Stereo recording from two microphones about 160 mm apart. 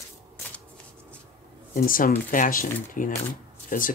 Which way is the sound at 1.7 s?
60° left (ahead or behind).